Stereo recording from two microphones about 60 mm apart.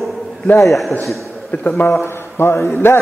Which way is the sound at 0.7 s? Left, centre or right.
Centre.